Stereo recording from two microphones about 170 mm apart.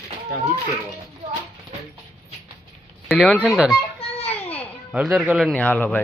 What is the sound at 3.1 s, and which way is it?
Speech, centre (ahead or behind).